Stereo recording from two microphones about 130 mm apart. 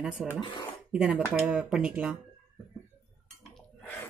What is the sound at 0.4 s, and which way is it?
Speech, 40° left (ahead or behind).